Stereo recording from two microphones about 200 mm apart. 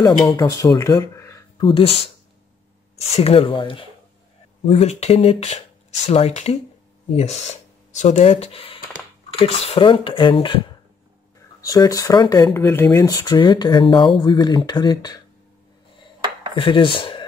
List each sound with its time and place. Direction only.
0.0 s speech: 15° left (ahead or behind)
3.1 s speech: 30° left (ahead or behind)
11.6 s speech: 15° left (ahead or behind)
16.5 s speech: 25° left (ahead or behind)